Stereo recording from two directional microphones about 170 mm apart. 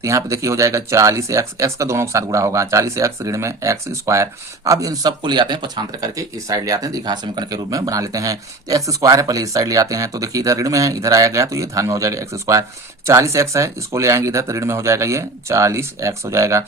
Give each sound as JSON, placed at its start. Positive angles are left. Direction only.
{"t": 0.0, "sound": "speech", "side_deg": -20}